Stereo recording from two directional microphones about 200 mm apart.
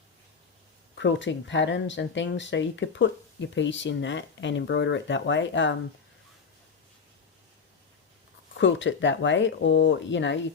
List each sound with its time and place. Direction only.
0.9 s speech: 65° left (ahead or behind)
8.5 s speech: 65° left (ahead or behind)